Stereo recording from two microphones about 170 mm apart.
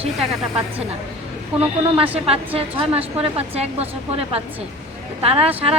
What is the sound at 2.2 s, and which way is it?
A woman's voice, 35° right (ahead or behind).